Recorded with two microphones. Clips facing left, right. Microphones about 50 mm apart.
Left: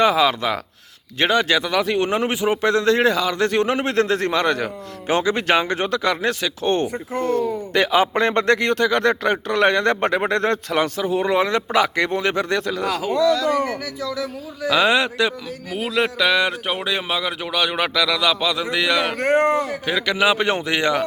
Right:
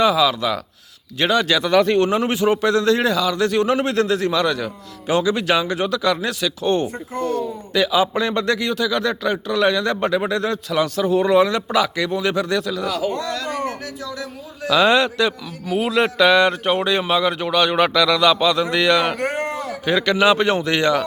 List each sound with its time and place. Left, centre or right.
0.0 s a man's voice: left
1.6 s speech: centre
2.0 s a man's voice: left
10.9 s a man's voice: left
14.7 s speech: centre
15.7 s a man's voice: centre